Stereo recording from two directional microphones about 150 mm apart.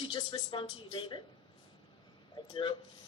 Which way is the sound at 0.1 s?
30° left (ahead or behind).